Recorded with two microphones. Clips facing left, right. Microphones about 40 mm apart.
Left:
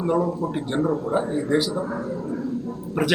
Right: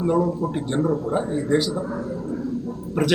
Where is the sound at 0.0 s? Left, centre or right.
Centre.